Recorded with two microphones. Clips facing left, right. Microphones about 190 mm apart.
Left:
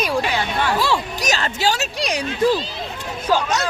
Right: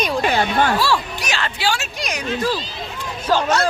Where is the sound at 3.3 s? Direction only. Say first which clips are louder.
Right 2 dB; 15° left (ahead or behind).